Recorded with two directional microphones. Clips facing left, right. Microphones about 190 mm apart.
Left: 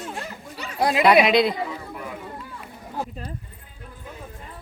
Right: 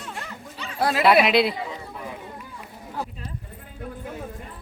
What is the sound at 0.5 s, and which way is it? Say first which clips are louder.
Speech: left 2 dB; 15° left (ahead or behind).